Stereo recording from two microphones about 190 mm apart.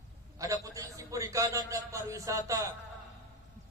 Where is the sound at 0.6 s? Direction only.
15° right (ahead or behind).